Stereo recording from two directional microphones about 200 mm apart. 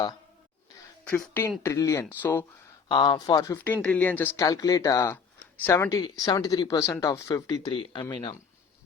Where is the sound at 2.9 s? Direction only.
20° left (ahead or behind).